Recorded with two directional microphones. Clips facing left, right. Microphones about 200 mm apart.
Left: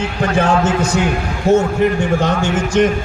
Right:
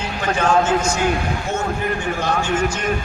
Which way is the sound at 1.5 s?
40° left (ahead or behind).